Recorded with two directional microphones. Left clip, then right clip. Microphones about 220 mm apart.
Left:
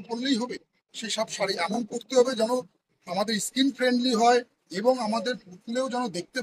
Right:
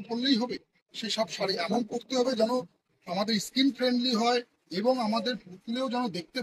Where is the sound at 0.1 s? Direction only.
35° left (ahead or behind).